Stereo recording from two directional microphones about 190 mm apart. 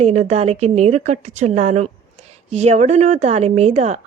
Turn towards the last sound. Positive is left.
turn(degrees=-35)  # may be behind; listen again after turning